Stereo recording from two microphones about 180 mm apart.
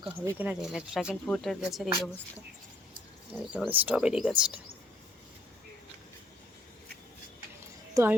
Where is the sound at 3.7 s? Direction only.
10° right (ahead or behind).